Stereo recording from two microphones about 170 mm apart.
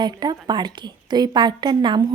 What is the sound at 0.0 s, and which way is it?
A woman's voice, 25° right (ahead or behind).